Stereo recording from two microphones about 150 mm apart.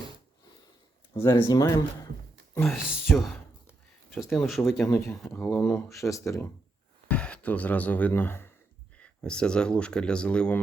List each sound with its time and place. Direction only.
1.2 s speech: 20° left (ahead or behind)
2.6 s speech: centre (ahead or behind)
5.5 s speech: 15° left (ahead or behind)
7.1 s speech: 10° left (ahead or behind)